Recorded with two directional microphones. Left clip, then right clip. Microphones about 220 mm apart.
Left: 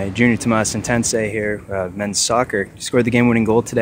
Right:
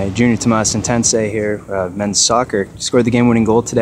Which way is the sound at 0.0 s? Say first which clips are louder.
Right 2 dB; 5° left (ahead or behind).